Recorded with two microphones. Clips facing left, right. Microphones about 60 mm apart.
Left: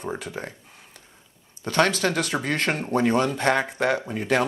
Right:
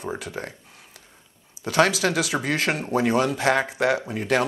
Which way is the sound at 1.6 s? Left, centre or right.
Centre.